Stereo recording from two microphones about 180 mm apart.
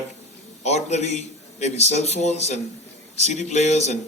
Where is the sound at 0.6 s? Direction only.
40° left (ahead or behind).